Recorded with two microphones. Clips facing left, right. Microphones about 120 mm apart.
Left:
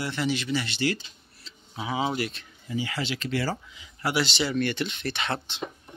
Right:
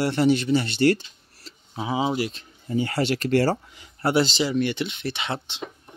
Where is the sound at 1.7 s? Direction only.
25° right (ahead or behind).